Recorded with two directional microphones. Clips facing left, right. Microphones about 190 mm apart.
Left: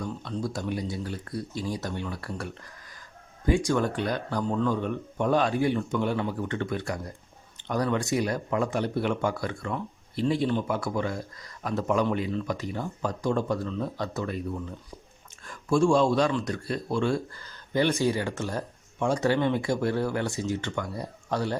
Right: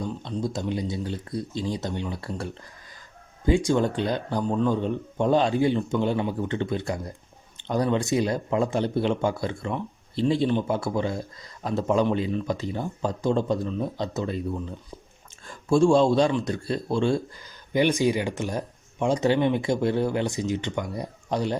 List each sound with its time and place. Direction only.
0.0 s speech: 20° right (ahead or behind)
3.7 s speech: 25° right (ahead or behind)
17.4 s speech: 15° right (ahead or behind)